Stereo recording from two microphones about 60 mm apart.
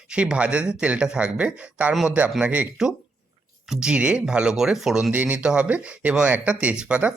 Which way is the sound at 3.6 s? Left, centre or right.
Centre.